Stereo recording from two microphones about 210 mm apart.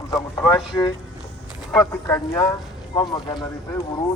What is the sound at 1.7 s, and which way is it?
Speech, 15° left (ahead or behind).